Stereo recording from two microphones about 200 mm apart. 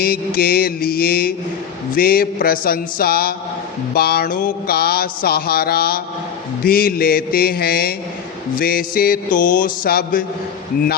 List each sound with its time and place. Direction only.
0.0 s mantra: 50° left (ahead or behind)